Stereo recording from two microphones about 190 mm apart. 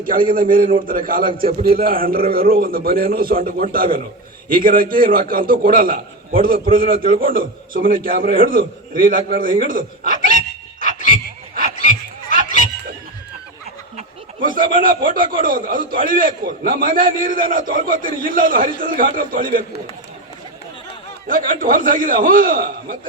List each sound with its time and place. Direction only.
0.0 s a man's voice: 50° right (ahead or behind)
14.4 s a man's voice: 45° right (ahead or behind)
21.2 s a man's voice: 45° right (ahead or behind)